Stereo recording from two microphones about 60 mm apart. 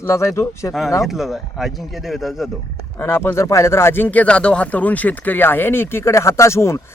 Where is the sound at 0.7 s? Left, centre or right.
Left.